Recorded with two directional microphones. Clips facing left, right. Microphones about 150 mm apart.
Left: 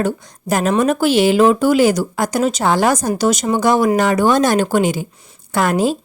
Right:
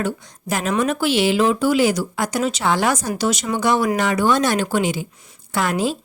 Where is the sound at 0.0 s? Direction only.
45° left (ahead or behind).